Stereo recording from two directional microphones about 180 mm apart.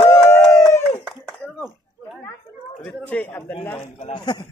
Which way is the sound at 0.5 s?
15° left (ahead or behind).